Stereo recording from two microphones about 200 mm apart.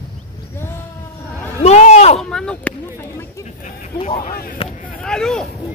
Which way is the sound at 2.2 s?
5° left (ahead or behind).